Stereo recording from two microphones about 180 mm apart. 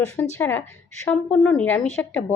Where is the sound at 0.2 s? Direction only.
10° left (ahead or behind).